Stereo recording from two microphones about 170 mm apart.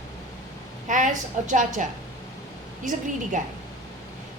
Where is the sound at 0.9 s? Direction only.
50° right (ahead or behind).